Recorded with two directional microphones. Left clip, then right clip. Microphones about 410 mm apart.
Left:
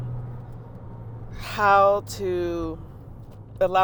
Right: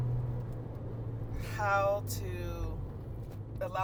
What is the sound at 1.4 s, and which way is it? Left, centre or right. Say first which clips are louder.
Speech: left 13 dB; left.